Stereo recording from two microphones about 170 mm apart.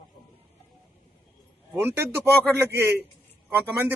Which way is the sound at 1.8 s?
15° right (ahead or behind).